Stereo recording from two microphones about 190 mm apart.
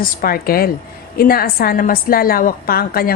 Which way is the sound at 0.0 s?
50° left (ahead or behind).